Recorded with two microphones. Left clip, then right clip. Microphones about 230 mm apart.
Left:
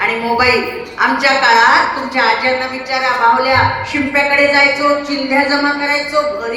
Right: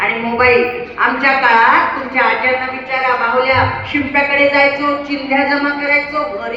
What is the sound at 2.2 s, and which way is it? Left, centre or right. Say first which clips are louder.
A woman's voice: even; left.